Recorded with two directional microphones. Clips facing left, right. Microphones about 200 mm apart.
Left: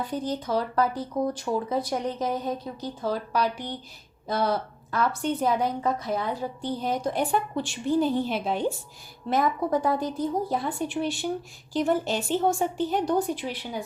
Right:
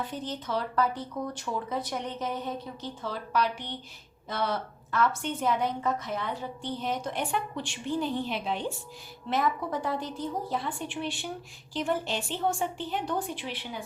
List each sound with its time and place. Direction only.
0.3 s speech: 40° left (ahead or behind)